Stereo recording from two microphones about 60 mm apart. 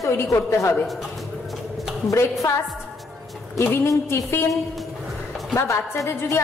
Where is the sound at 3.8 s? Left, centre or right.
Left.